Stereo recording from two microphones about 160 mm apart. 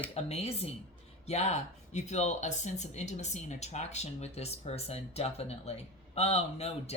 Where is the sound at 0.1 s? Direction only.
40° left (ahead or behind).